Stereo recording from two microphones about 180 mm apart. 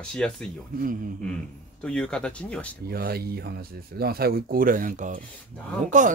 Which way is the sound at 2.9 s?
60° right (ahead or behind).